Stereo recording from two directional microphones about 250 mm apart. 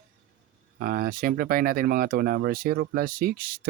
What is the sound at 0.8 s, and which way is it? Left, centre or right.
Speech, right.